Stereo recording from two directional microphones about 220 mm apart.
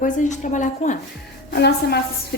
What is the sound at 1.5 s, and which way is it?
Speech, 45° left (ahead or behind).